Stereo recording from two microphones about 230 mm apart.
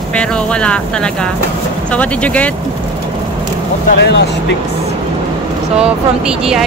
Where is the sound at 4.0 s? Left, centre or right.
Left.